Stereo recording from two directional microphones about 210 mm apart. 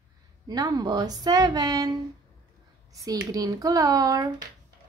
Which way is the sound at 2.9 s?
15° right (ahead or behind).